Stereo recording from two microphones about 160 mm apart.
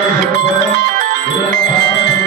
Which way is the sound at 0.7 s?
70° right (ahead or behind).